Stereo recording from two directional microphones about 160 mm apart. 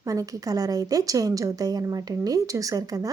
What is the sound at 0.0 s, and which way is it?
Speech, 20° right (ahead or behind).